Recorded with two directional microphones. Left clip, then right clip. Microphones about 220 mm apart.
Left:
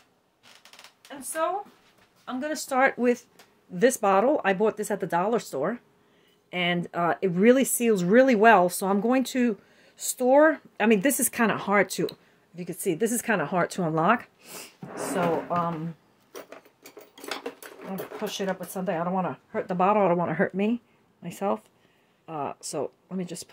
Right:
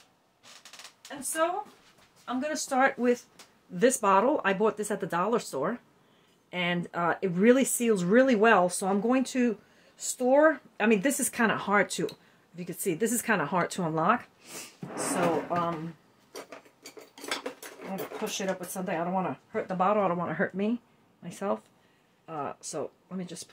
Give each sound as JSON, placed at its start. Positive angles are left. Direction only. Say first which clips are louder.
{"t": 2.2, "sound": "speech", "louder": "left 1 dB", "side_deg": 45}
{"t": 3.7, "sound": "speech", "louder": "left 2 dB", "side_deg": 20}
{"t": 14.0, "sound": "speech", "louder": "left 2 dB", "side_deg": 40}
{"t": 16.3, "sound": "a sound", "louder": "left 1 dB", "side_deg": 40}
{"t": 18.2, "sound": "speech", "louder": "left 3 dB", "side_deg": 45}